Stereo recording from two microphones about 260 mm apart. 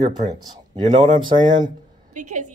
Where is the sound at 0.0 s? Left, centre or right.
Right.